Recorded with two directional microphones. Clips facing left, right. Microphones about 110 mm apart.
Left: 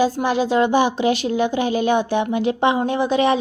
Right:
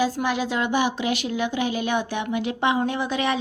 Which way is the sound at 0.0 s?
30° left (ahead or behind).